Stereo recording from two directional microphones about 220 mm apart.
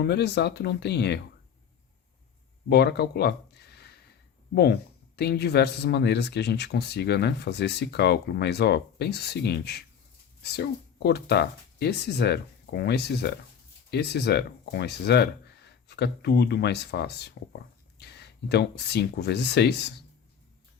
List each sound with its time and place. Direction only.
0.0 s speech: 50° left (ahead or behind)
2.6 s a sound: 45° left (ahead or behind)
4.5 s speech: 45° left (ahead or behind)